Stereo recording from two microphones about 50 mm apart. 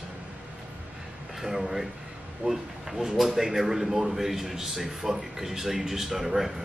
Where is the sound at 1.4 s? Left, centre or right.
Centre.